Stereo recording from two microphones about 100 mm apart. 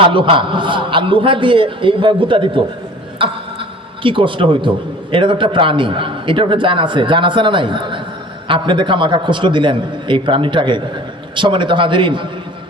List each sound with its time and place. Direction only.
0.0 s a man's voice: 60° right (ahead or behind)
3.2 s a sound: 60° right (ahead or behind)
5.1 s a man's voice: 55° right (ahead or behind)